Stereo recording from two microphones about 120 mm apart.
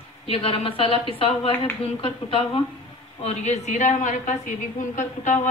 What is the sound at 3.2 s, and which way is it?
A woman's voice, 65° left (ahead or behind).